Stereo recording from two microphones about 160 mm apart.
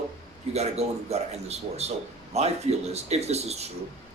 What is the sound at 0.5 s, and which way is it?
A man's voice, 40° right (ahead or behind).